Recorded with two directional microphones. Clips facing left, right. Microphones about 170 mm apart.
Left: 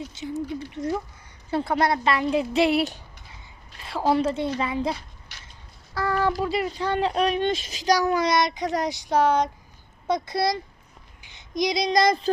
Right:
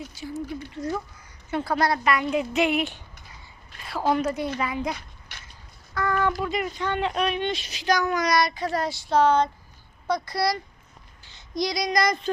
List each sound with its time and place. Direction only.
0.1 s a woman's voice: 20° left (ahead or behind)
5.3 s duck: 55° right (ahead or behind)
5.9 s a sound: 30° left (ahead or behind)
6.4 s speech: 30° left (ahead or behind); by 9.5 s 10° left (ahead or behind)
10.1 s a woman's voice: 20° left (ahead or behind)